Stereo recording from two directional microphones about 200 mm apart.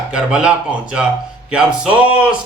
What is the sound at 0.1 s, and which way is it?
A man's voice, 5° right (ahead or behind).